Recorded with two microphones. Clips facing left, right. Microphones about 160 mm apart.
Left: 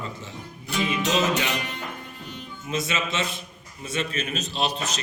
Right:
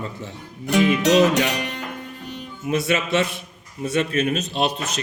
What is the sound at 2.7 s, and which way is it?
A man's voice, 60° right (ahead or behind).